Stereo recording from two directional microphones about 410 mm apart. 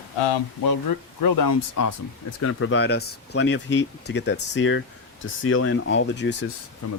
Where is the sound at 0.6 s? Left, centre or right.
Left.